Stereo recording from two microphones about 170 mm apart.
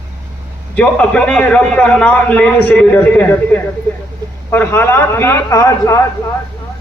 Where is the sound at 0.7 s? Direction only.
5° left (ahead or behind).